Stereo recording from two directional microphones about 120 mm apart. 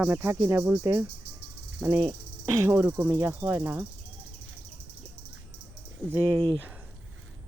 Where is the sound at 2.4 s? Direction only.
20° right (ahead or behind).